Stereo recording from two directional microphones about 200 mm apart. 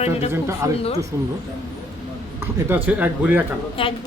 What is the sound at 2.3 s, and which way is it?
Speech, 10° right (ahead or behind).